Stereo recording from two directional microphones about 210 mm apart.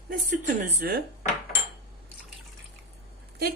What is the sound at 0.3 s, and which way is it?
Speech, 40° right (ahead or behind).